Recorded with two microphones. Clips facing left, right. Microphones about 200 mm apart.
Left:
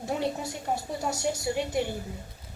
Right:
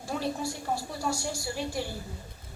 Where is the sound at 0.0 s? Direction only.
20° left (ahead or behind).